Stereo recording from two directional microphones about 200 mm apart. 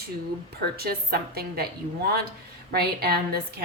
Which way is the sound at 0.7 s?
50° right (ahead or behind).